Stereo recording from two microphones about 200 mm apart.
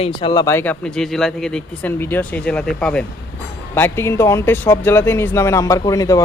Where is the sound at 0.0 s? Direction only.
25° left (ahead or behind).